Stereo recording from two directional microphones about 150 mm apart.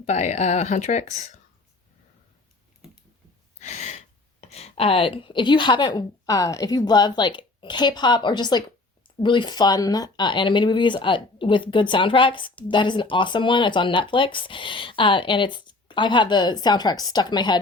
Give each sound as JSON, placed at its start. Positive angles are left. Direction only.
{"t": 0.0, "sound": "speech", "side_deg": 50}
{"t": 3.6, "sound": "gasp", "side_deg": 50}
{"t": 4.5, "sound": "speech", "side_deg": 45}